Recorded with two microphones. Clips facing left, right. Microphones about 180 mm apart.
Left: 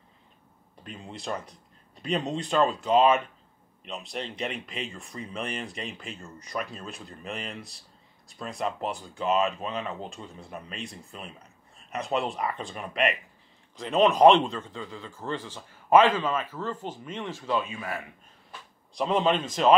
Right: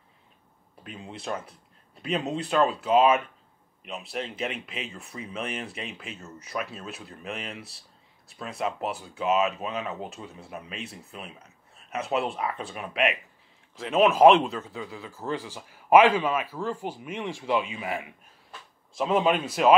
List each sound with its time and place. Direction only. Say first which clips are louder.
0.8 s a man's voice: right 1 dB; centre (ahead or behind)
18.9 s a man's voice: right 1 dB; 5° right (ahead or behind)